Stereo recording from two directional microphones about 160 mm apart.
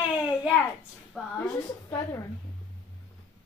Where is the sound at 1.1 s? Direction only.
5° left (ahead or behind).